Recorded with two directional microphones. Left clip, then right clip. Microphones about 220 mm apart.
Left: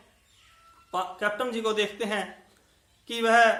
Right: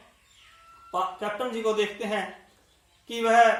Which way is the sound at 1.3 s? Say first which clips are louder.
Right 1 dB; 15° left (ahead or behind).